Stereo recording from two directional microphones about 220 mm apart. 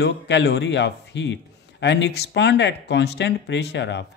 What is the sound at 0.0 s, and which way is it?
A man's voice, 50° left (ahead or behind).